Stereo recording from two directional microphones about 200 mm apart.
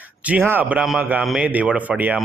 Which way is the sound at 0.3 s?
10° right (ahead or behind).